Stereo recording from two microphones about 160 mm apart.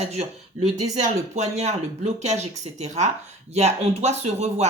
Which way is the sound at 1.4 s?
45° right (ahead or behind).